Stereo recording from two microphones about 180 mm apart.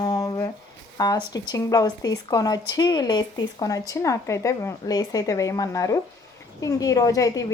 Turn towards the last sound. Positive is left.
turn(degrees=20)  # may be behind; listen again after turning